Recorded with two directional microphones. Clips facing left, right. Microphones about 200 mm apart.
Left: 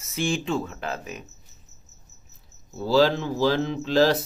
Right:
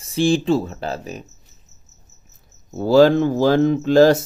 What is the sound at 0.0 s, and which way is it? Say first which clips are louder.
Speech: right 9 dB; 30° right (ahead or behind).